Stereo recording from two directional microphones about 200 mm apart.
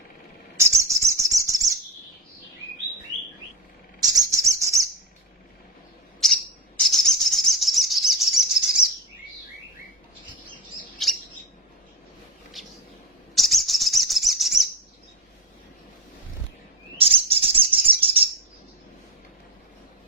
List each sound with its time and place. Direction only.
0.5 s bird: 15° right (ahead or behind)
4.0 s bird: 20° right (ahead or behind)
6.2 s bird: centre (ahead or behind)
11.0 s bird: centre (ahead or behind)
13.3 s bird: centre (ahead or behind)
17.0 s bird: 30° right (ahead or behind)